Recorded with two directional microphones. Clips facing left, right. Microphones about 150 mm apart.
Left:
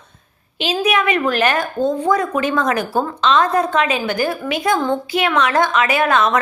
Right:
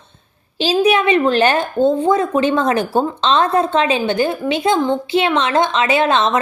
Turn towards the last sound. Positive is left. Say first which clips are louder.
# right 1 dB
turn(degrees=-25)  # may be behind; listen again after turning